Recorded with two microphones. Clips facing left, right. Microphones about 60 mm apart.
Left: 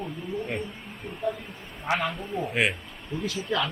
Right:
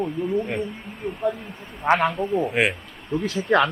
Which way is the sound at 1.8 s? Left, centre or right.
Right.